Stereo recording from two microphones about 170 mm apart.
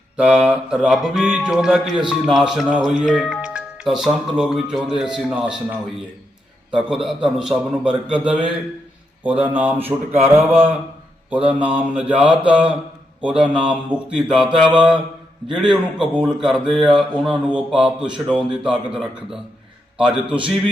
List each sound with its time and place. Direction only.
0.2 s speech: 5° right (ahead or behind)
6.7 s speech: 5° right (ahead or behind)
9.4 s speech: 10° right (ahead or behind)
20.2 s a man's voice: 30° right (ahead or behind)